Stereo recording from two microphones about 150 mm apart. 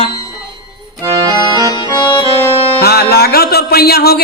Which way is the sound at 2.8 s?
90° left.